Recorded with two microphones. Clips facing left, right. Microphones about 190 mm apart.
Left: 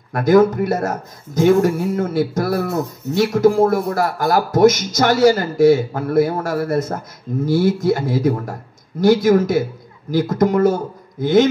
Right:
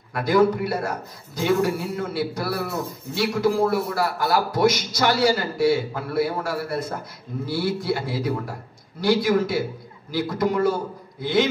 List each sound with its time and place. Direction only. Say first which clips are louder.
0.1 s a man's voice: left 6 dB; 45° left (ahead or behind)